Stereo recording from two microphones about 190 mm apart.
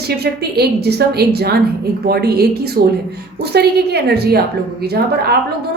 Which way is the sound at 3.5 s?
60° right (ahead or behind).